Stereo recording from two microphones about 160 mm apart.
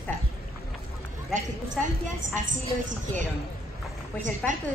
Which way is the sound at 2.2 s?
55° right (ahead or behind).